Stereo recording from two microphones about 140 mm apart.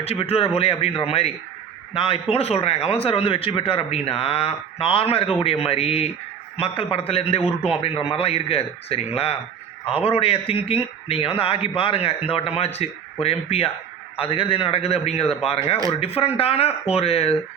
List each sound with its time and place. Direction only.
0.0 s a man's voice: 45° left (ahead or behind)